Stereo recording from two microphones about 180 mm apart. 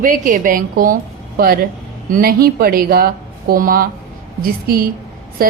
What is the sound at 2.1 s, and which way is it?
A woman's voice, 55° right (ahead or behind).